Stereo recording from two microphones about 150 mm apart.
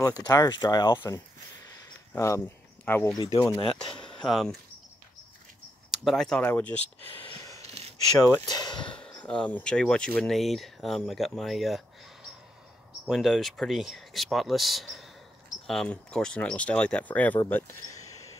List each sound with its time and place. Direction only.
0.2 s speech: 25° left (ahead or behind)
2.1 s speech: 20° left (ahead or behind)
3.2 s speech: 25° left (ahead or behind)
3.9 s a sound: 30° left (ahead or behind)
4.2 s speech: centre (ahead or behind)
5.9 s speech: centre (ahead or behind)
7.1 s a sound: 35° left (ahead or behind)
7.5 s a sound: 45° right (ahead or behind)
8.2 s speech: 15° left (ahead or behind)
8.5 s a sound: 30° left (ahead or behind)
8.9 s speech: 5° left (ahead or behind)
13.0 s speech: centre (ahead or behind)